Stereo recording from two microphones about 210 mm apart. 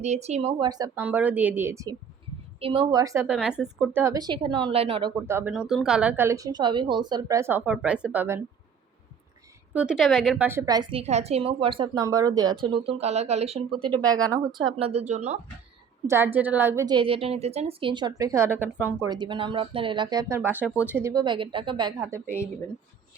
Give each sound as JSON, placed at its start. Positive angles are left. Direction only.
{"t": 0.0, "sound": "speech", "side_deg": -30}
{"t": 1.0, "sound": "a woman's voice", "side_deg": -10}
{"t": 2.6, "sound": "a woman's voice", "side_deg": -25}
{"t": 3.3, "sound": "speech", "side_deg": -5}
{"t": 4.0, "sound": "speech", "side_deg": -15}
{"t": 5.1, "sound": "a woman's voice", "side_deg": -10}
{"t": 9.7, "sound": "speech", "side_deg": -5}
{"t": 16.0, "sound": "a woman's voice", "side_deg": -10}
{"t": 19.0, "sound": "speech", "side_deg": -20}